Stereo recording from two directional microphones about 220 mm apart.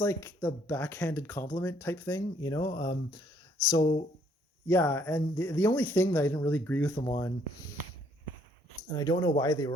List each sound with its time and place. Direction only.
0.0 s speech: 10° left (ahead or behind)
8.9 s speech: 20° left (ahead or behind)